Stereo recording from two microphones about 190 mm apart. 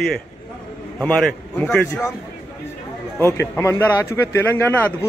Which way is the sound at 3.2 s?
15° left (ahead or behind).